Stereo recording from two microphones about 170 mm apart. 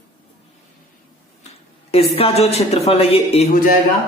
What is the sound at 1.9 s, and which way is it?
Speech, 35° left (ahead or behind).